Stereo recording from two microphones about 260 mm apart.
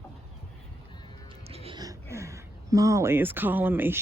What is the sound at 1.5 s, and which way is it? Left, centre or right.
A woman's voice, right.